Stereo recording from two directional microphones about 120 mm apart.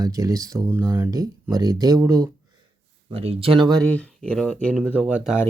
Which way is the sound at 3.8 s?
10° left (ahead or behind).